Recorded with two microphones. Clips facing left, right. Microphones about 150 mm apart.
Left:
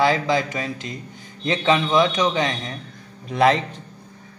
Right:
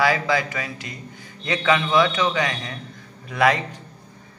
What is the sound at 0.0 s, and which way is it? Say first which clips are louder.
Speech: left 2 dB; 20° left (ahead or behind).